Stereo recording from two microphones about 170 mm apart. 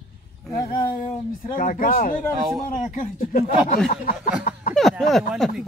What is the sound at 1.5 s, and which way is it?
Speech, 50° left (ahead or behind).